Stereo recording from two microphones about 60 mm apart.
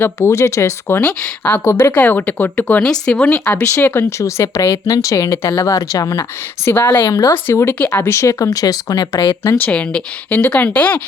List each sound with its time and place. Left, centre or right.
0.2 s speech: left
1.2 s speech: left
4.2 s speech: left
6.7 s speech: left
7.1 s speech: left
7.4 s speech: left
8.2 s speech: left
9.6 s speech: left